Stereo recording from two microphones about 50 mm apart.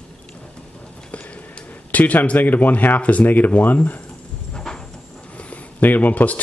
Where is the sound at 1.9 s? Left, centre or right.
Left.